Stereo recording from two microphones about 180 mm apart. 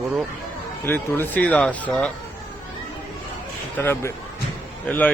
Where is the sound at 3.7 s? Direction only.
10° left (ahead or behind).